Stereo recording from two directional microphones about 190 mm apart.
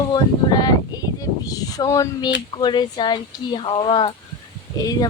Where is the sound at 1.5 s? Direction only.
20° left (ahead or behind).